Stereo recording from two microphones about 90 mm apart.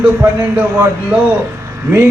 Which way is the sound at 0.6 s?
20° right (ahead or behind).